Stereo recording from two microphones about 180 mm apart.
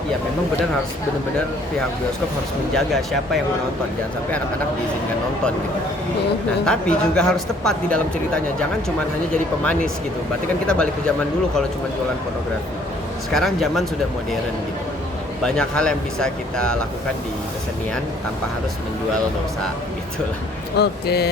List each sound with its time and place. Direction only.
2.7 s speech: centre (ahead or behind)
6.7 s speech: 5° left (ahead or behind)
10.7 s speech: 5° left (ahead or behind)
13.3 s speech: centre (ahead or behind)
15.4 s speech: 5° left (ahead or behind)
20.7 s speech: 65° left (ahead or behind)